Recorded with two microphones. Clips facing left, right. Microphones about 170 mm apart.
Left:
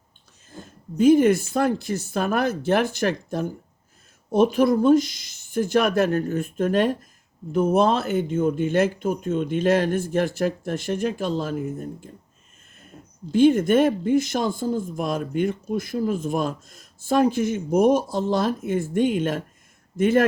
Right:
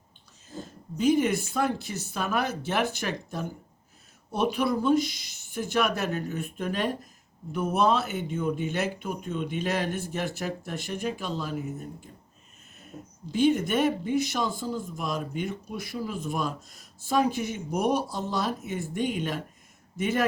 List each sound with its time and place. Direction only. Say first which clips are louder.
0.5 s speech: left 6 dB; 50° left (ahead or behind)
13.3 s speech: left 7 dB; 50° left (ahead or behind)